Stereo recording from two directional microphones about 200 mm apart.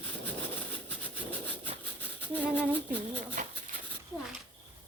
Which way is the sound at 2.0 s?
10° left (ahead or behind).